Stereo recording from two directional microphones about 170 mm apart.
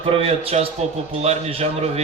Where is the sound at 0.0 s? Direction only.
35° right (ahead or behind).